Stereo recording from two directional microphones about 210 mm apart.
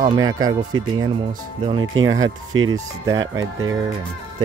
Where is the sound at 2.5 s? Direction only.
75° right (ahead or behind).